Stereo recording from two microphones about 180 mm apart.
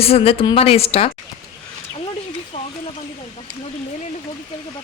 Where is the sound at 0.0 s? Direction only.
35° left (ahead or behind).